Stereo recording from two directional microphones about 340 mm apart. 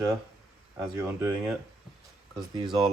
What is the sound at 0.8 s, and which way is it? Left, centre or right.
Speech, centre.